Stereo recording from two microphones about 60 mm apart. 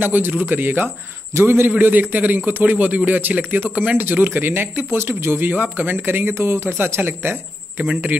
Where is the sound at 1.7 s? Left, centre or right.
Right.